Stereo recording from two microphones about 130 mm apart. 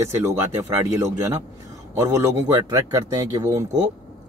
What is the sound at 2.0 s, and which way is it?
Speech, 25° right (ahead or behind).